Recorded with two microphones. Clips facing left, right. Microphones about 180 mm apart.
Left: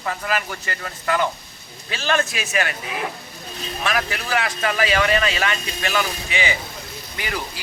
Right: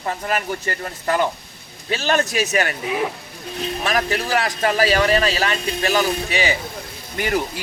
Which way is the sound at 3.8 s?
40° right (ahead or behind).